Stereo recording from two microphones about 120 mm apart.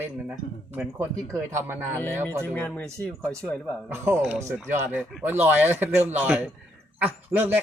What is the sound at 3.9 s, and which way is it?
Speech, 20° right (ahead or behind).